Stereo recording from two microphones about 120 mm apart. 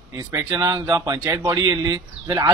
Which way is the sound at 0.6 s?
30° right (ahead or behind).